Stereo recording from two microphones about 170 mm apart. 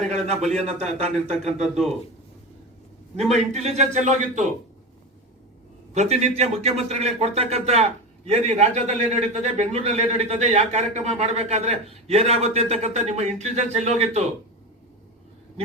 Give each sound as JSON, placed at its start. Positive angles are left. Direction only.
{"t": 0.1, "sound": "a man's voice", "side_deg": -40}
{"t": 1.6, "sound": "a man's voice", "side_deg": 0}
{"t": 3.2, "sound": "a man's voice", "side_deg": -40}
{"t": 5.9, "sound": "speech", "side_deg": -40}